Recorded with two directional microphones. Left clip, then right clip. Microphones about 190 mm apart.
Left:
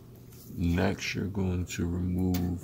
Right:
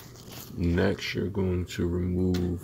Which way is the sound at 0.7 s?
15° right (ahead or behind).